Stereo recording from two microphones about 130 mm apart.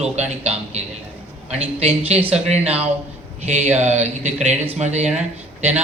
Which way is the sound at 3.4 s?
60° right (ahead or behind).